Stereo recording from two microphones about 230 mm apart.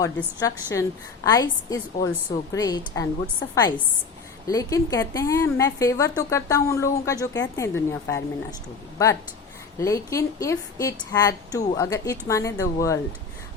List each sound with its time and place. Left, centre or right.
0.0 s a woman's voice: centre
9.7 s a woman's voice: centre